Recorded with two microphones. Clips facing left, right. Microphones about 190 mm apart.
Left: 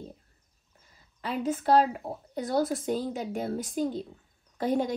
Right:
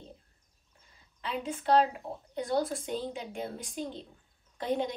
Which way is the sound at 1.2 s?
45° left (ahead or behind).